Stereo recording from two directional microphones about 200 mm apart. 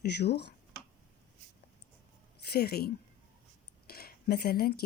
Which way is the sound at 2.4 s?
50° left (ahead or behind).